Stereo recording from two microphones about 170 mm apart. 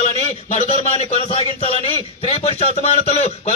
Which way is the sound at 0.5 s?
40° left (ahead or behind).